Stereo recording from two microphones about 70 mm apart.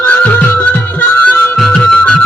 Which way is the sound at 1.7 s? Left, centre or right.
Centre.